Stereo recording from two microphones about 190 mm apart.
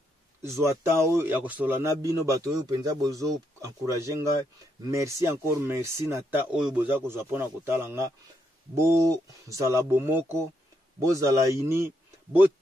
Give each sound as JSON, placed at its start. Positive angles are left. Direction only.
{"t": 0.6, "sound": "a man's voice", "side_deg": -15}